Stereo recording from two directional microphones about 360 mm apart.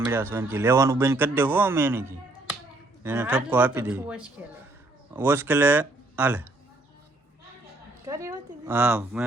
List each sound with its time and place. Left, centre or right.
0.1 s speech: centre
8.0 s speech: centre